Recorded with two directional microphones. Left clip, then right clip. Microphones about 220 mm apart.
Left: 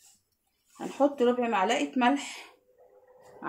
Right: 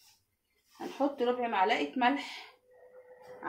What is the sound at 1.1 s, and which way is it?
Speech, 55° left (ahead or behind).